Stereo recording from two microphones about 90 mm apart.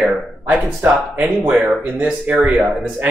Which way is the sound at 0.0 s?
15° right (ahead or behind).